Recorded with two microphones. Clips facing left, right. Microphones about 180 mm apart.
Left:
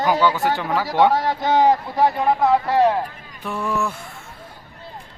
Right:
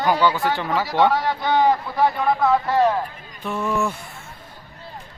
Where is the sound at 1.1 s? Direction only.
40° left (ahead or behind).